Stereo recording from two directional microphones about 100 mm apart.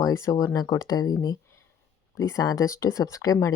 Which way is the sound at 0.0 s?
40° left (ahead or behind).